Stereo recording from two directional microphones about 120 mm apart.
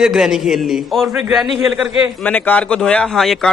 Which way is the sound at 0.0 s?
5° right (ahead or behind).